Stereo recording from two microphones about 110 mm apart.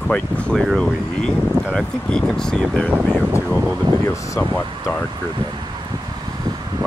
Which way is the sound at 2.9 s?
15° right (ahead or behind).